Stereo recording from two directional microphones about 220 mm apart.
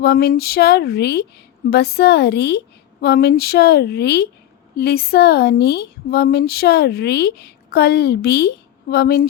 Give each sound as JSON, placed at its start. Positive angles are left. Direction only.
{"t": 0.0, "sound": "a woman's voice", "side_deg": 45}